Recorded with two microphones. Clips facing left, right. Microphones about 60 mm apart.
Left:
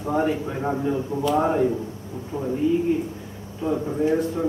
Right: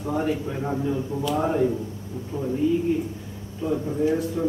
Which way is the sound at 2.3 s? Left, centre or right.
Left.